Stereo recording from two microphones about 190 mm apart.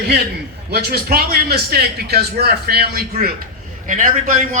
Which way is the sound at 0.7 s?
55° right (ahead or behind).